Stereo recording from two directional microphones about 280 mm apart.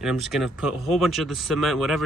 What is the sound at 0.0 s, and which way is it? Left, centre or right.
Speech, centre.